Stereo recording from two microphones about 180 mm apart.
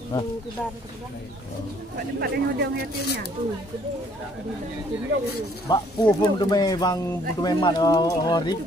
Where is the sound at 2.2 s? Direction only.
60° right (ahead or behind).